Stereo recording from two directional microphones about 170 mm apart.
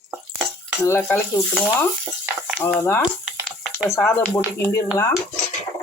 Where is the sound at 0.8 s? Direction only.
15° left (ahead or behind).